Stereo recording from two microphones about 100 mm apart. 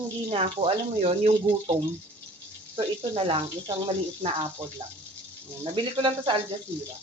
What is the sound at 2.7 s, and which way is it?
Speech, 60° right (ahead or behind).